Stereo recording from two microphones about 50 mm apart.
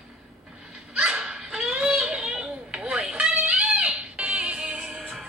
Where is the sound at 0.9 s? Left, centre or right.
Centre.